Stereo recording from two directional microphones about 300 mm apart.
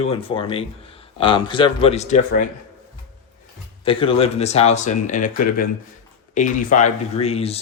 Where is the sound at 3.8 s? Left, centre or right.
Centre.